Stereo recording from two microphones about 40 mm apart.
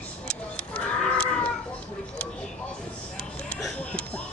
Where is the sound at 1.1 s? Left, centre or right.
Left.